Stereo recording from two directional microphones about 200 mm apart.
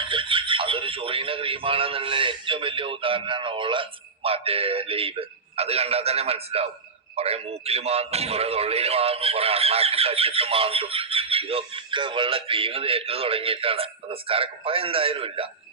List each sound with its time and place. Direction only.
0.0 s a man's voice: 25° right (ahead or behind)